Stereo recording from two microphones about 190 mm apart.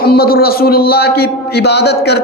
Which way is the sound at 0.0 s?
55° left (ahead or behind).